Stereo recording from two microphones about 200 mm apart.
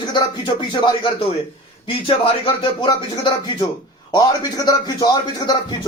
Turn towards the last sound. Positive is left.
turn(degrees=20)  # may be behind; listen again after turning